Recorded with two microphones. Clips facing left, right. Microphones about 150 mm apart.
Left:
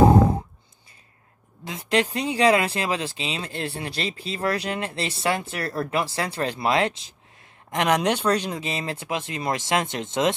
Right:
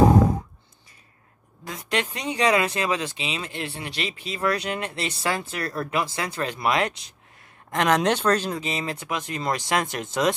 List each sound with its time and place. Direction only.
1.6 s speech: 25° left (ahead or behind)
7.7 s speech: 15° left (ahead or behind)
8.5 s speech: 25° left (ahead or behind)